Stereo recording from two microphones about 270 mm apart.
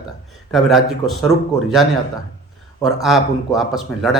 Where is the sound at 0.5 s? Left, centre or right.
Centre.